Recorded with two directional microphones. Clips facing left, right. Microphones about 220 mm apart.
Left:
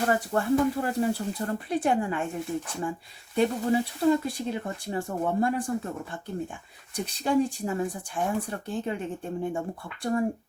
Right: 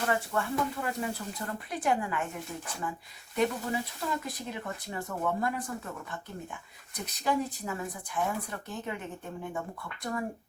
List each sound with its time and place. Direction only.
0.1 s speech: 35° left (ahead or behind)
3.3 s speech: 30° left (ahead or behind)